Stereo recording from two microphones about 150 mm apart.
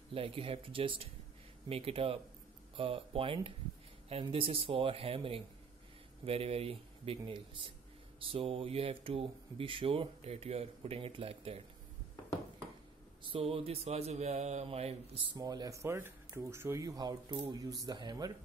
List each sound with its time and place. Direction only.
0.1 s speech: 40° right (ahead or behind)
13.3 s mantra: 40° right (ahead or behind)
15.3 s speech: 25° right (ahead or behind)